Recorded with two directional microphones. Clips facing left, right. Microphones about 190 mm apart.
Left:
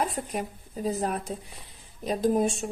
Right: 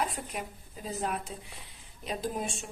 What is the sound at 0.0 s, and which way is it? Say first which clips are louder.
A woman's voice: left 5 dB; 40° left (ahead or behind).